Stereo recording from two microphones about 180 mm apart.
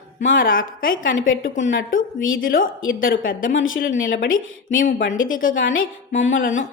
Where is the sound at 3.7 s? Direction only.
50° left (ahead or behind).